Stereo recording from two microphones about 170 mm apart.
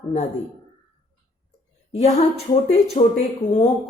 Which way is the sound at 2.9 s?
40° left (ahead or behind).